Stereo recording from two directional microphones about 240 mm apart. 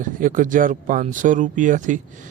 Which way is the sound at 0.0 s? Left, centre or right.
Right.